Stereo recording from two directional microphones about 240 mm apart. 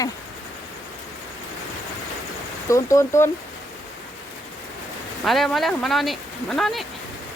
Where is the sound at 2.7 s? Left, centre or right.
Centre.